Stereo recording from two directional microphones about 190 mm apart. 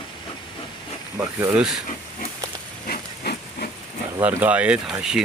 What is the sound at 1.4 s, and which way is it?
Speech, 10° right (ahead or behind).